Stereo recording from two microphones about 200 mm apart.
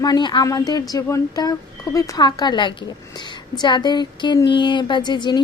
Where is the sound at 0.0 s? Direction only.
20° left (ahead or behind).